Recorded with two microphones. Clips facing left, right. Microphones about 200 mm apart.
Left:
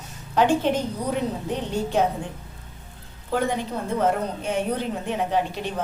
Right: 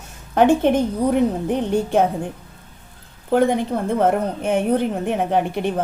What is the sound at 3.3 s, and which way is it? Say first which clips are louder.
A woman's voice: right 7 dB; 55° right (ahead or behind).